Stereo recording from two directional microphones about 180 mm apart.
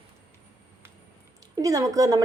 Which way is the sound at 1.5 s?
20° right (ahead or behind).